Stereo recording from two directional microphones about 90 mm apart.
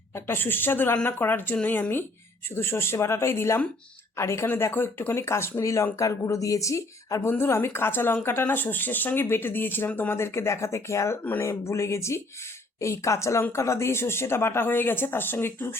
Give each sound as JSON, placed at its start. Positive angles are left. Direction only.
{"t": 0.3, "sound": "speech", "side_deg": 25}